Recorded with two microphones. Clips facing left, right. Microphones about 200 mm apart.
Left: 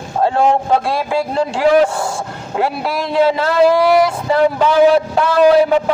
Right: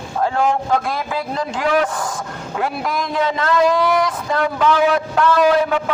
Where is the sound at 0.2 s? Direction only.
30° left (ahead or behind).